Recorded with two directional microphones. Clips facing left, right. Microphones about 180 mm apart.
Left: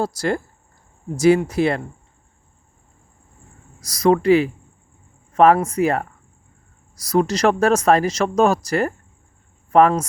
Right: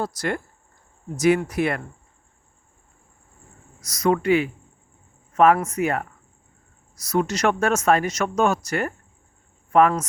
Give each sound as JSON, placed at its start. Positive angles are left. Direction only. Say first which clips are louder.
{"t": 0.0, "sound": "speech", "louder": "left 4 dB", "side_deg": 30}
{"t": 3.8, "sound": "speech", "louder": "left 5 dB", "side_deg": 30}